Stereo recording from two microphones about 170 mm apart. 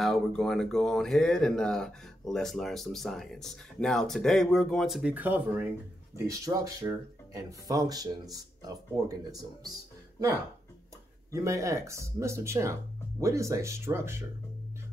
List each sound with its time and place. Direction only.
0.0 s speech: centre (ahead or behind); by 9.4 s 20° right (ahead or behind)
11.3 s speech: 20° right (ahead or behind)